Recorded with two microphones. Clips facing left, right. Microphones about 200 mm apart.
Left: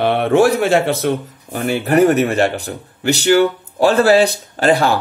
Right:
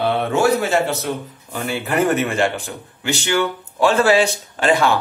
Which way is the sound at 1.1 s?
65° left (ahead or behind).